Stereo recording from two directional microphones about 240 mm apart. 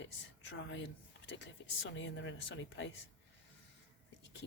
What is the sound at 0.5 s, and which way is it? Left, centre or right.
Speech, left.